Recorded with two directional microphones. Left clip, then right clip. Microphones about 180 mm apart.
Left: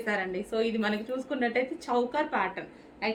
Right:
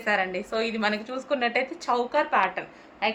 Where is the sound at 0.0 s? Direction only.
20° left (ahead or behind).